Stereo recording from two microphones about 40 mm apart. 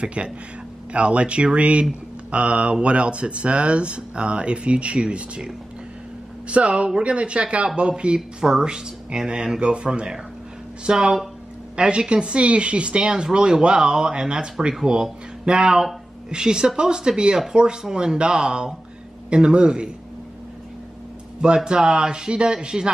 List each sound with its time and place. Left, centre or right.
0.0 s speech: right
6.5 s speech: right
21.4 s speech: right